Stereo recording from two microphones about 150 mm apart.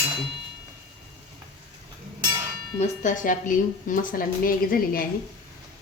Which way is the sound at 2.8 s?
60° left (ahead or behind).